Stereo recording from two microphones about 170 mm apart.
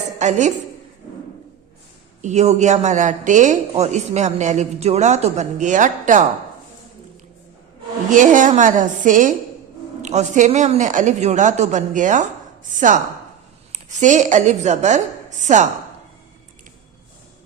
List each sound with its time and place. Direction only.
0.2 s a woman's voice: 45° right (ahead or behind)
2.2 s a woman's voice: 40° right (ahead or behind)
8.1 s a woman's voice: 50° right (ahead or behind)
13.7 s a woman's voice: 45° right (ahead or behind)